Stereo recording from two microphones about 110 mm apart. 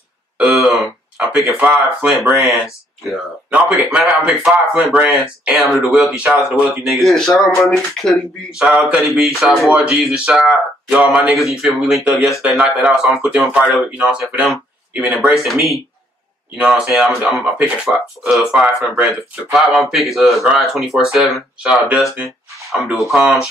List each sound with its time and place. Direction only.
0.4 s a sound: centre (ahead or behind)
1.1 s speech: 5° right (ahead or behind)
3.4 s speech: 10° right (ahead or behind)
4.9 s speech: 15° right (ahead or behind)
5.5 s speech: centre (ahead or behind)
7.0 s speech: centre (ahead or behind)
8.6 s speech: 10° right (ahead or behind)
16.5 s speech: 10° right (ahead or behind)